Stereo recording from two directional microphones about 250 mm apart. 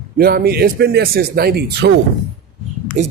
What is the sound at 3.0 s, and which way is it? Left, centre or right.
Speech, right.